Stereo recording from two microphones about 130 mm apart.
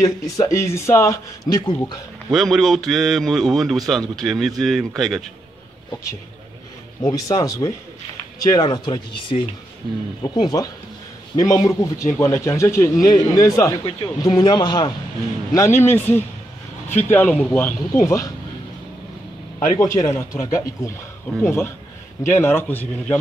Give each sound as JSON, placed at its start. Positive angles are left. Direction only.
{"t": 0.0, "sound": "speech", "side_deg": 25}
{"t": 2.3, "sound": "a man's voice", "side_deg": 0}
{"t": 7.0, "sound": "speech", "side_deg": 25}
{"t": 15.5, "sound": "speech", "side_deg": 20}
{"t": 19.8, "sound": "speech", "side_deg": 25}